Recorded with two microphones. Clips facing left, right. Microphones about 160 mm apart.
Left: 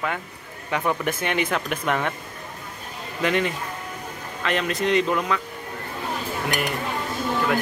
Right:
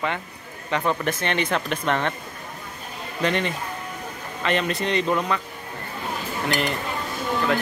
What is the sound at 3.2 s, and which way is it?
Speech, 5° left (ahead or behind).